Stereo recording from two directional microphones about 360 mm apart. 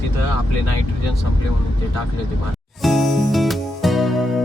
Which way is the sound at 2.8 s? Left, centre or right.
Centre.